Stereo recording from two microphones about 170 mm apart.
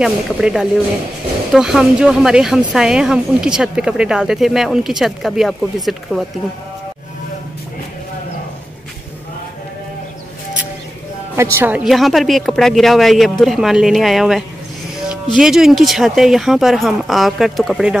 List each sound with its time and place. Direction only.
0.0 s speech: 5° right (ahead or behind)
11.5 s speech: 10° right (ahead or behind)